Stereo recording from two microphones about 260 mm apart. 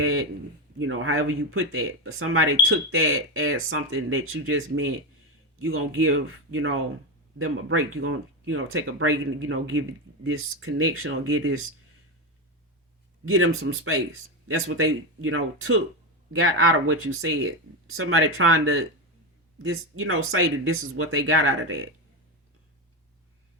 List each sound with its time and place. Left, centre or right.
0.0 s a sound: right
0.8 s speech: right
13.2 s speech: right